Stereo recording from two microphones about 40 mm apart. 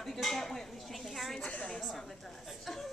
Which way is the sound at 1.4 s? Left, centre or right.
Left.